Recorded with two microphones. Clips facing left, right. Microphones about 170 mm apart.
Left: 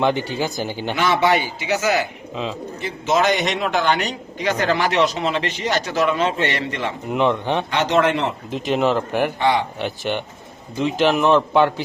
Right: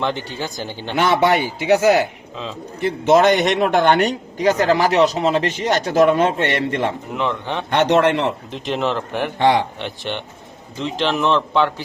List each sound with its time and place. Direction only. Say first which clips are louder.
0.0 s speech: left 4 dB; 10° left (ahead or behind)
0.9 s a man's voice: right 2 dB; 60° right (ahead or behind)
7.1 s speech: left 4 dB; 15° left (ahead or behind)
7.7 s a man's voice: right 5 dB; 60° right (ahead or behind)
8.6 s speech: left 3 dB; 5° left (ahead or behind)